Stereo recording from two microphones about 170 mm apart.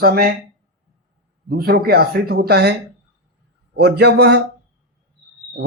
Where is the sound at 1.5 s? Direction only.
65° right (ahead or behind).